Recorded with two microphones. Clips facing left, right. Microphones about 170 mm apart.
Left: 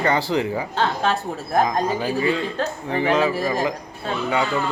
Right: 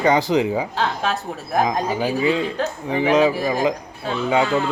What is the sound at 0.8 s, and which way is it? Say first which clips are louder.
Speech: left 1 dB; centre (ahead or behind).